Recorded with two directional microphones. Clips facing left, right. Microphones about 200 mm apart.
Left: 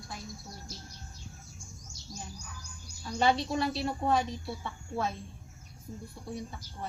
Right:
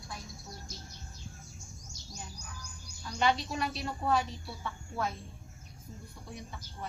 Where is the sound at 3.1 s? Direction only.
30° left (ahead or behind).